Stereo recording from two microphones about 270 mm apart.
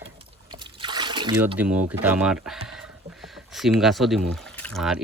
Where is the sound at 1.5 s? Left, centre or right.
Centre.